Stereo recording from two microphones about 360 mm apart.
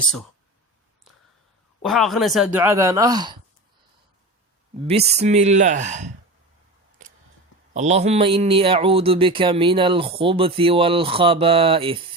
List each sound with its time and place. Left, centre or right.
1.8 s speech: centre
4.9 s speech: centre
7.7 s a man's voice: centre